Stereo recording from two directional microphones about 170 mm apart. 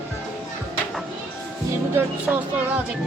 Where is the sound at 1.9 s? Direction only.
10° right (ahead or behind).